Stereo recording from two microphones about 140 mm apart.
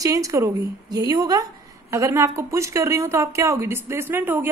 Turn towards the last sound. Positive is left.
turn(degrees=-15)  # may be behind; listen again after turning